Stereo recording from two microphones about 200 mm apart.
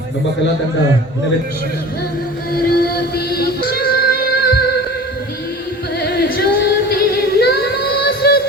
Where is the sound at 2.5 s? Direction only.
50° left (ahead or behind).